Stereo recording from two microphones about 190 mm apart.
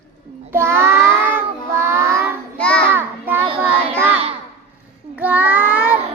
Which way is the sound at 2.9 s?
10° right (ahead or behind).